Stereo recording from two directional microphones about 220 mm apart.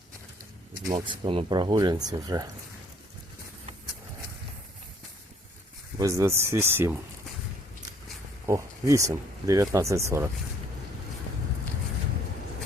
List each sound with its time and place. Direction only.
0.9 s speech: 20° right (ahead or behind)
6.0 s speech: 15° right (ahead or behind)
8.4 s speech: 15° right (ahead or behind)